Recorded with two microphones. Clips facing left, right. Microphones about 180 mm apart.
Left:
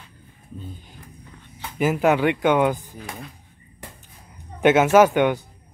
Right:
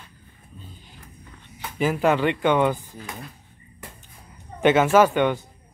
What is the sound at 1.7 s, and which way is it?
Speech, 5° left (ahead or behind).